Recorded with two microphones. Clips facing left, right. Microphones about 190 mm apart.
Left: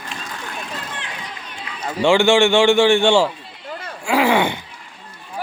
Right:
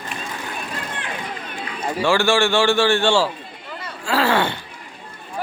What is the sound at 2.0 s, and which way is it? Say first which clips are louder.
A man's voice: left 4 dB; 20° left (ahead or behind).